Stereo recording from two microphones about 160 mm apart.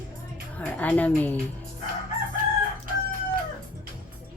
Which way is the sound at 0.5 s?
10° left (ahead or behind).